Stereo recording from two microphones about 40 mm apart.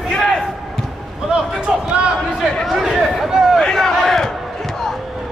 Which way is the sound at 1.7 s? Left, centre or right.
Centre.